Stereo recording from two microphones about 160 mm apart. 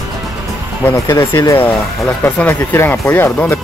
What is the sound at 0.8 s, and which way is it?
Speech, 15° left (ahead or behind).